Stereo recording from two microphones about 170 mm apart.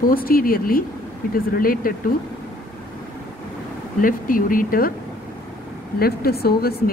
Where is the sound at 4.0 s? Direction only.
55° left (ahead or behind).